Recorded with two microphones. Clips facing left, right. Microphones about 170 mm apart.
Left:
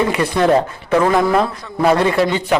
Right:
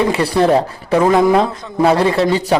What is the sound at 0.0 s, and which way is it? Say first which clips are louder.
Speech: right 2 dB; 30° right (ahead or behind).